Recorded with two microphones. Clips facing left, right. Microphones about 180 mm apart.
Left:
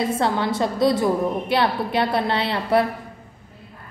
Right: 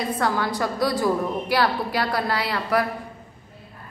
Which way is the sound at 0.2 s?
25° left (ahead or behind).